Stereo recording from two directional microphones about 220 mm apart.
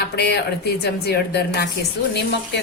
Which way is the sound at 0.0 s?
50° left (ahead or behind).